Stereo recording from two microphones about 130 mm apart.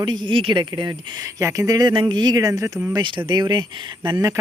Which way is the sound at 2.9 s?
40° right (ahead or behind).